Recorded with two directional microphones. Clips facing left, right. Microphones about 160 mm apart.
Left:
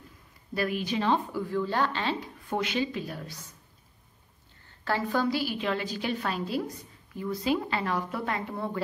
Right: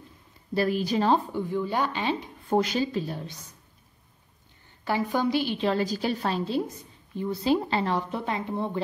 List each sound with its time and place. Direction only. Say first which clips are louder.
0.6 s a woman's voice: right 4 dB; 35° right (ahead or behind)
1.3 s speech: right 1 dB; 20° right (ahead or behind)
2.5 s a woman's voice: right 5 dB; 35° right (ahead or behind); by 3.5 s 20° right (ahead or behind)
4.6 s a woman's voice: right 2 dB; 15° right (ahead or behind)